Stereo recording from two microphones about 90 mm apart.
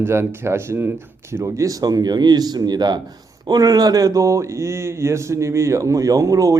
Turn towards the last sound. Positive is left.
turn(degrees=-40)  # may be behind; listen again after turning